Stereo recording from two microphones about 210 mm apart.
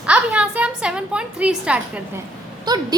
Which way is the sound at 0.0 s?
5° right (ahead or behind).